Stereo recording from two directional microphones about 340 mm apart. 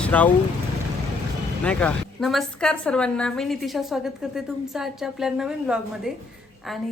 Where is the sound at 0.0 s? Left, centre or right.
Centre.